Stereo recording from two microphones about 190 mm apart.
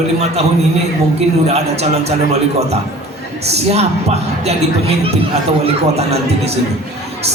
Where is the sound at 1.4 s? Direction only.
35° right (ahead or behind).